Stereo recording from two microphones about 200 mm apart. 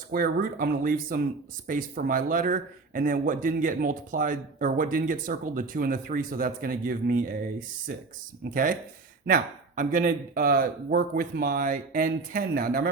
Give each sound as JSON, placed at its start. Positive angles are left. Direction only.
{"t": 0.1, "sound": "speech", "side_deg": -45}
{"t": 8.4, "sound": "speech", "side_deg": -45}